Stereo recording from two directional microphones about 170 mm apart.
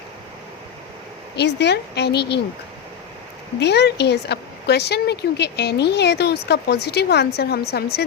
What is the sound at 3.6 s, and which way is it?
A woman's voice, 80° left.